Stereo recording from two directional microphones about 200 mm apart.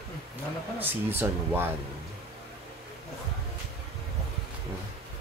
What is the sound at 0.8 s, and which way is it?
Speech, 10° right (ahead or behind).